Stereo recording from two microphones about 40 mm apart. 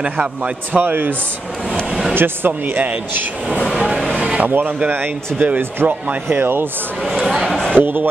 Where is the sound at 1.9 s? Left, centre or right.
Centre.